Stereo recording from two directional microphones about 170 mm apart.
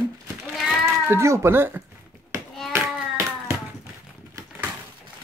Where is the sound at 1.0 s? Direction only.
15° right (ahead or behind).